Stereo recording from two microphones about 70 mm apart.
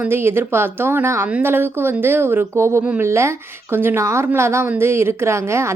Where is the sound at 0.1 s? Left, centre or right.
Right.